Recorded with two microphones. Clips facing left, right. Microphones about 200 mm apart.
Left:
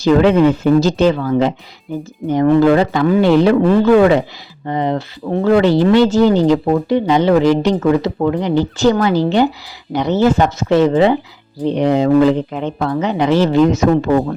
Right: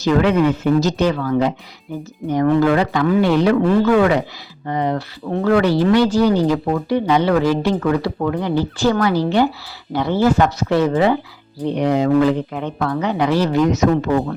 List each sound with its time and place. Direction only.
0.0 s speech: 30° left (ahead or behind)